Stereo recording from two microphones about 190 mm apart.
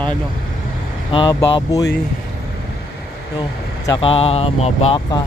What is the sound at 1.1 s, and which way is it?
Speech, 25° left (ahead or behind).